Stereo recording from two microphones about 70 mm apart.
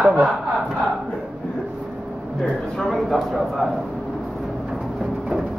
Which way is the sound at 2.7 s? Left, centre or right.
Centre.